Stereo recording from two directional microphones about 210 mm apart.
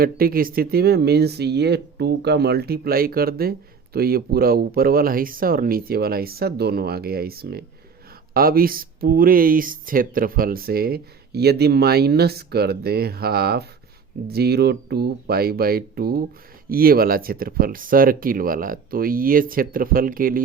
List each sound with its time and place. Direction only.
0.0 s speech: 45° right (ahead or behind)